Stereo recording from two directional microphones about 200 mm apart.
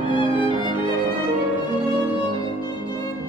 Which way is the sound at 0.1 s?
25° left (ahead or behind).